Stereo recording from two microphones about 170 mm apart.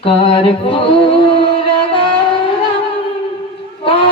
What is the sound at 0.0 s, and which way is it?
Music, 35° left (ahead or behind).